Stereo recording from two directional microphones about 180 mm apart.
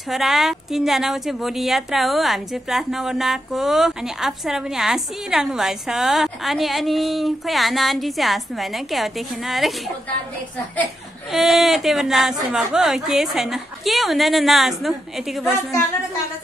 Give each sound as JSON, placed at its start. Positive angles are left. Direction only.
{"t": 0.1, "sound": "a woman's voice", "side_deg": 0}
{"t": 11.3, "sound": "a woman's voice", "side_deg": 0}